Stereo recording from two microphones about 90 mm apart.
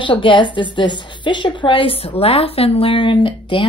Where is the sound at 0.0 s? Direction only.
65° left (ahead or behind).